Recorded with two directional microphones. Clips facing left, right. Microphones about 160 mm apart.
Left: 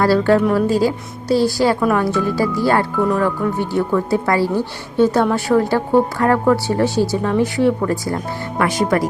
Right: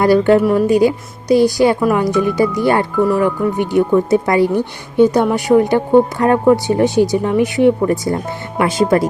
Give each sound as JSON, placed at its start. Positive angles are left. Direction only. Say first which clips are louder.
{"t": 0.0, "sound": "speech", "louder": "right 3 dB", "side_deg": -20}